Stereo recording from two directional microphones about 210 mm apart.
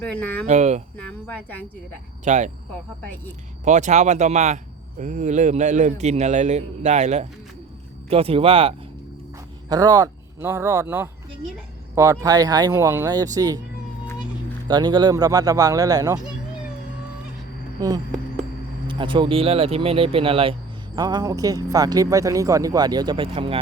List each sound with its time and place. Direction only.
0.0 s speech: 5° left (ahead or behind)
0.4 s speech: 35° right (ahead or behind)
0.9 s speech: 5° left (ahead or behind)
2.2 s speech: 35° right (ahead or behind)
3.0 s speech: 10° left (ahead or behind)
3.6 s speech: 35° right (ahead or behind); by 13.6 s 15° right (ahead or behind)
14.7 s speech: 20° right (ahead or behind)
17.7 s speech: 15° right (ahead or behind)